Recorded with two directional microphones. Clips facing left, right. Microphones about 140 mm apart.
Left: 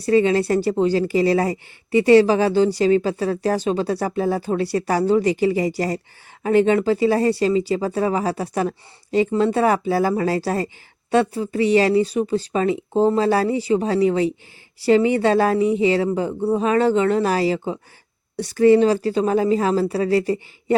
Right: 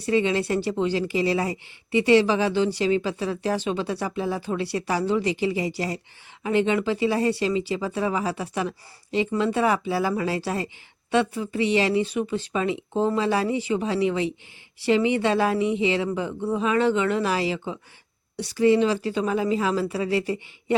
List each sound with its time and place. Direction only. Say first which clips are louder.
0.0 s speech: left 6 dB; 40° left (ahead or behind)